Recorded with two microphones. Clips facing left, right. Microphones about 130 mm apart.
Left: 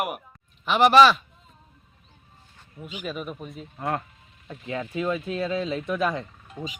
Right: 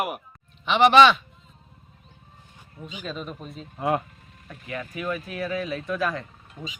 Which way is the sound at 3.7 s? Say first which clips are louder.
Right 4 dB; 20° right (ahead or behind).